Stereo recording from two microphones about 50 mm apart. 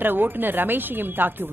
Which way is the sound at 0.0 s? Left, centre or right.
Right.